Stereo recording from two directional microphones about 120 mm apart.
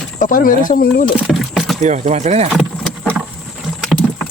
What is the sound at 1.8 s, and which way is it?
Speech, 70° right (ahead or behind).